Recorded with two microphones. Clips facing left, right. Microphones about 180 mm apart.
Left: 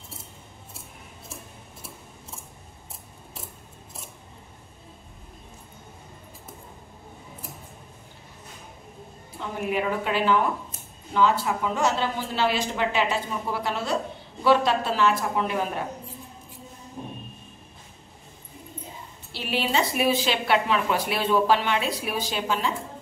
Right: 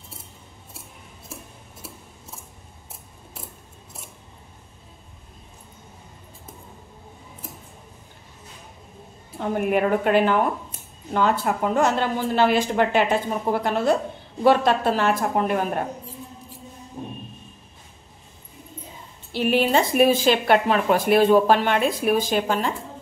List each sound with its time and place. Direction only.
9.4 s a woman's voice: 55° right (ahead or behind)
19.3 s a woman's voice: 50° right (ahead or behind)